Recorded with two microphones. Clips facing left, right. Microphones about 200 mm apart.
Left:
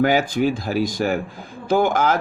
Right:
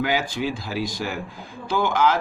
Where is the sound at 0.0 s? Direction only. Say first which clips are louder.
Left 6 dB; 50° left (ahead or behind).